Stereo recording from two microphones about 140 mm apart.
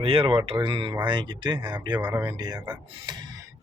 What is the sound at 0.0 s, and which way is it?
Speech, 40° right (ahead or behind).